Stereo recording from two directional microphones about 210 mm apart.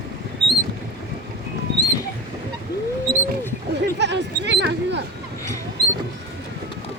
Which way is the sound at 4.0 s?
55° right (ahead or behind).